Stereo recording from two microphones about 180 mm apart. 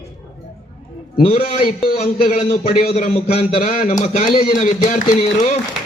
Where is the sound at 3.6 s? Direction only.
50° left (ahead or behind).